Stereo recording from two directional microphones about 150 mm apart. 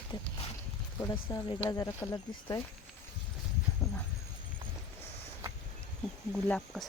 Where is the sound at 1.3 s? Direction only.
20° left (ahead or behind).